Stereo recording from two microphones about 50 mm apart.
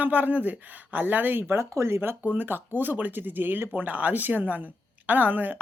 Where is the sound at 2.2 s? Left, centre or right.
Right.